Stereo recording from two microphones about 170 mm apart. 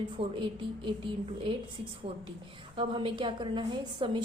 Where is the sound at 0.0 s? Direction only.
30° right (ahead or behind).